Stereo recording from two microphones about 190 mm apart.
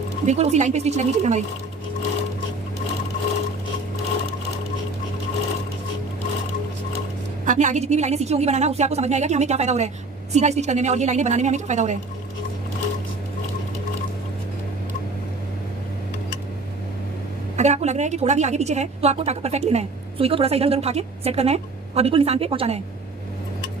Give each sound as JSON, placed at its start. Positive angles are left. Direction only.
{"t": 0.3, "sound": "a woman's voice", "side_deg": -35}
{"t": 7.4, "sound": "a woman's voice", "side_deg": -40}
{"t": 17.6, "sound": "a woman's voice", "side_deg": -35}